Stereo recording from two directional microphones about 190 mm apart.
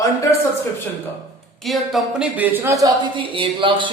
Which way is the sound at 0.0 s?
15° left (ahead or behind).